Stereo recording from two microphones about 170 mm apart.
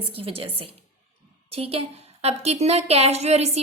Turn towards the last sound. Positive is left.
turn(degrees=-40)  # may be behind; listen again after turning